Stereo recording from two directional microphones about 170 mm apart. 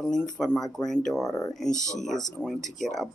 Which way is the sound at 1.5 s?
5° left (ahead or behind).